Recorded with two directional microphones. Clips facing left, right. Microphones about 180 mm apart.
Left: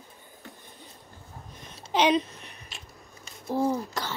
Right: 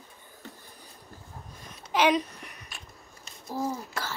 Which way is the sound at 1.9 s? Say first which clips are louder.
Left 1 dB; 25° left (ahead or behind).